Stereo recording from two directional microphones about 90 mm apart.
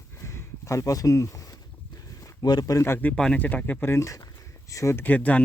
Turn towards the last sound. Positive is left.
turn(degrees=15)  # may be behind; listen again after turning